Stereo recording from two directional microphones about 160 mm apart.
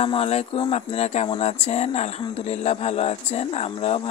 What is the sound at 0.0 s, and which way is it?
Speech, 40° left (ahead or behind).